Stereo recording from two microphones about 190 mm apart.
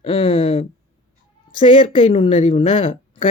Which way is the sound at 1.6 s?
35° left (ahead or behind).